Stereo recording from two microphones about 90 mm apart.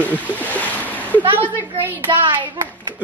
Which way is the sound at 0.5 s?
20° left (ahead or behind).